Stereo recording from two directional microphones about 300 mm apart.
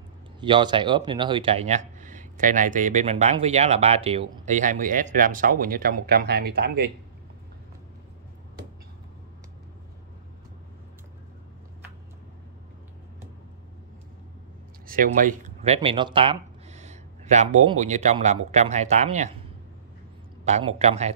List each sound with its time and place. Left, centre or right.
0.4 s speech: centre; by 6.9 s right
14.9 s speech: right
20.4 s speech: right